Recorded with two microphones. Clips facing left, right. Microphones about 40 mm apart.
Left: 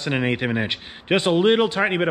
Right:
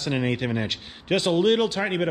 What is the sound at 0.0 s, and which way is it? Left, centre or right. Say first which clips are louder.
A man's voice: left 3 dB; left.